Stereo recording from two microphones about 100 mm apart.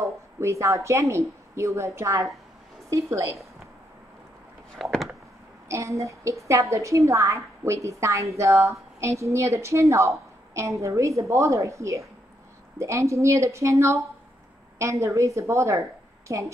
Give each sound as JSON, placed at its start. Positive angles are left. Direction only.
{"t": 0.0, "sound": "a woman's voice", "side_deg": -30}
{"t": 4.7, "sound": "a sound", "side_deg": 0}
{"t": 5.7, "sound": "a woman's voice", "side_deg": -30}